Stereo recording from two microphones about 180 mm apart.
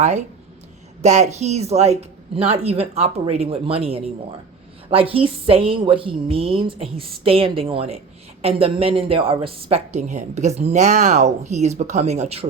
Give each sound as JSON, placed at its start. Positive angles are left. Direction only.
{"t": 1.0, "sound": "a woman's voice", "side_deg": -40}